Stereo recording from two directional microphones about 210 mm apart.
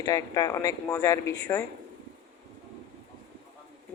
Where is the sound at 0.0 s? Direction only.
20° left (ahead or behind).